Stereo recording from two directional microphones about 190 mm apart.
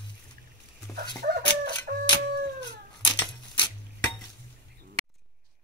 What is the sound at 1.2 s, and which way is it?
Chicken, 50° right (ahead or behind).